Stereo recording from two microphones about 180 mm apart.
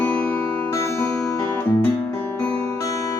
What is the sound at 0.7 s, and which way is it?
Music, 15° left (ahead or behind).